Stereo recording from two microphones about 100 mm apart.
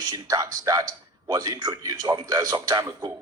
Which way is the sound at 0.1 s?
35° right (ahead or behind).